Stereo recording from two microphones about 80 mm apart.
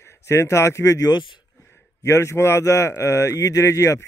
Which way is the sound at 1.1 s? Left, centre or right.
Left.